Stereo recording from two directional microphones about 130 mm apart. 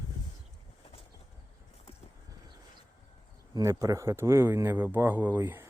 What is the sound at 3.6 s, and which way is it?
Speech, 25° right (ahead or behind).